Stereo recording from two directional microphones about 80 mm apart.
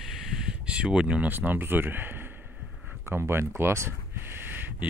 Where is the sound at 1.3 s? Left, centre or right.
Right.